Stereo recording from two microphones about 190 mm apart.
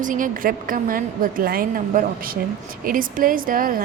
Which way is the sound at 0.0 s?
45° right (ahead or behind).